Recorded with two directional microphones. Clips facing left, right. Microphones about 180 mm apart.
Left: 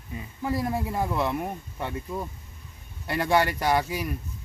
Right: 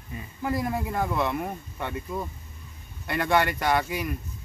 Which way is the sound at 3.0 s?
35° left (ahead or behind).